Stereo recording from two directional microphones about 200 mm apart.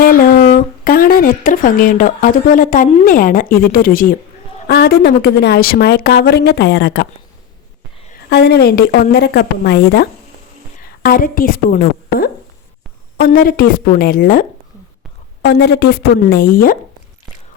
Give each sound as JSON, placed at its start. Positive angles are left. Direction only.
{"t": 0.0, "sound": "a woman's voice", "side_deg": 45}
{"t": 8.3, "sound": "a woman's voice", "side_deg": 55}
{"t": 13.1, "sound": "a woman's voice", "side_deg": 45}
{"t": 15.4, "sound": "a woman's voice", "side_deg": 55}